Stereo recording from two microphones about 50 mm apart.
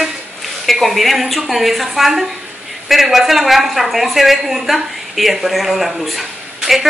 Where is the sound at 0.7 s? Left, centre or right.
Centre.